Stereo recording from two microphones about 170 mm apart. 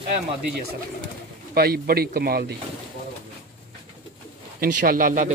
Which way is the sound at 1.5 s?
65° right (ahead or behind).